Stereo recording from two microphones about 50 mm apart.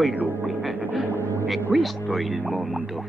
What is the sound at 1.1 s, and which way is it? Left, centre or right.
Speech, left.